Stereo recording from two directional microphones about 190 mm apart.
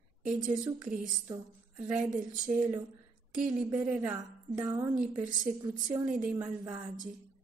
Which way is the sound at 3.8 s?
15° right (ahead or behind).